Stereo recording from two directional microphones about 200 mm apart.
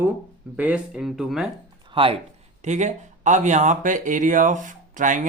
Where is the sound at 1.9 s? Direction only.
25° right (ahead or behind).